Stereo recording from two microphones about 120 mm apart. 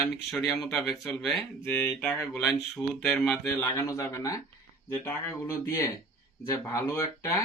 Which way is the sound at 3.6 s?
25° left (ahead or behind).